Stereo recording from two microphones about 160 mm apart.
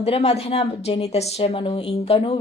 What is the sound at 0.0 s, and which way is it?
Speech, 40° left (ahead or behind).